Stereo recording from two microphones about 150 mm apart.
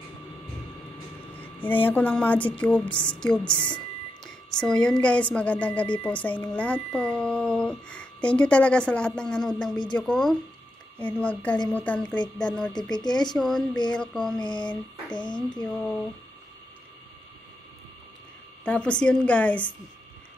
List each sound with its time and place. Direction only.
1.3 s speech: 10° left (ahead or behind)
9.9 s mantra: centre (ahead or behind)
11.0 s speech: 10° left (ahead or behind)
12.9 s speech: 30° left (ahead or behind)
13.4 s mantra: centre (ahead or behind)
14.4 s a sound: 30° left (ahead or behind)
15.5 s mantra: 5° left (ahead or behind)
18.6 s speech: 10° left (ahead or behind)